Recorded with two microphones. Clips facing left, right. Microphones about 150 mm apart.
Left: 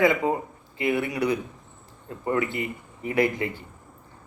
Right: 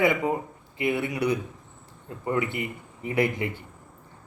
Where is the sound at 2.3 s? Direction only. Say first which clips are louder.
Left 1 dB; 20° right (ahead or behind).